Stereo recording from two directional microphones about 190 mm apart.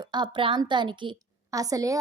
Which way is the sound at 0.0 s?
25° right (ahead or behind).